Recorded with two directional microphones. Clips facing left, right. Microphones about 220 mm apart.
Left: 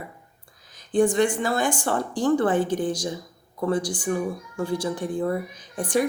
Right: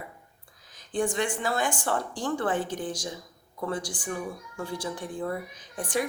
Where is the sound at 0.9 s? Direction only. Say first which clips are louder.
Left 8 dB; 40° left (ahead or behind).